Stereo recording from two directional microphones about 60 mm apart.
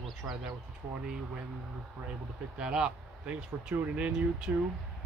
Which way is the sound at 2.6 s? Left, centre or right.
Centre.